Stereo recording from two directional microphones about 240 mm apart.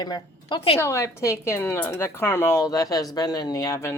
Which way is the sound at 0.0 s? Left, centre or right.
Centre.